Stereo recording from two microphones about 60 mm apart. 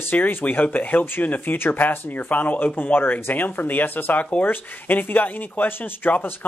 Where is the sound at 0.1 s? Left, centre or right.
Left.